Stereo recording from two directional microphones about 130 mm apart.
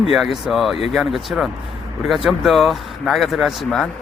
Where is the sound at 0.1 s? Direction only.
Centre (ahead or behind).